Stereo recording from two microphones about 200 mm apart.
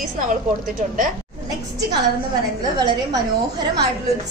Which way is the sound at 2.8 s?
20° right (ahead or behind).